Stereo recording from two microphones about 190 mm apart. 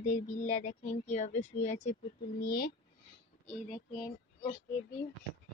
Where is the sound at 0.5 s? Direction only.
35° left (ahead or behind).